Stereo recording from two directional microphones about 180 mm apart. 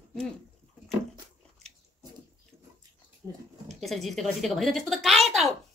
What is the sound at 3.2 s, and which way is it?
Speech, 25° right (ahead or behind).